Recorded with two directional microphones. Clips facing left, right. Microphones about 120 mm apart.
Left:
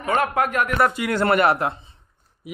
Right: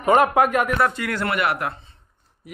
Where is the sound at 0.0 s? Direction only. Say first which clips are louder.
Right 5 dB; 15° right (ahead or behind).